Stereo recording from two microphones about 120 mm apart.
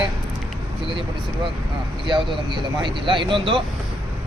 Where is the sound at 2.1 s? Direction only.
45° right (ahead or behind).